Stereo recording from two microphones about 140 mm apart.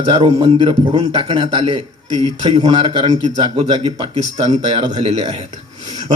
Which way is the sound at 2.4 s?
30° right (ahead or behind).